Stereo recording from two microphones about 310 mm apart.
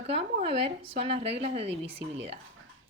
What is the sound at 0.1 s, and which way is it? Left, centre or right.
A woman's voice, centre.